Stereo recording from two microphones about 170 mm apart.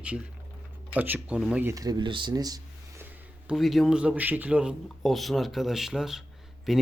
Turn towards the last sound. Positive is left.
turn(degrees=0)  # may be behind; listen again after turning